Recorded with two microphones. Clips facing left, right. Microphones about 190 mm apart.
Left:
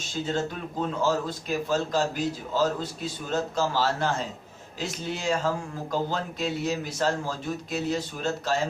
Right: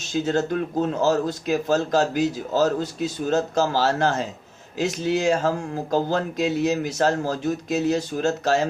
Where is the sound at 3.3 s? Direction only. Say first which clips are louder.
Right 4 dB; 75° right (ahead or behind).